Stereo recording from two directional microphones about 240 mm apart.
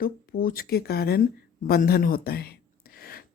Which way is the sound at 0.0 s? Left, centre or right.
Left.